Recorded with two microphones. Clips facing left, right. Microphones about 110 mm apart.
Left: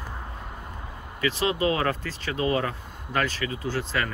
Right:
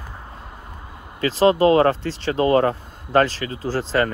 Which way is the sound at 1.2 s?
35° right (ahead or behind).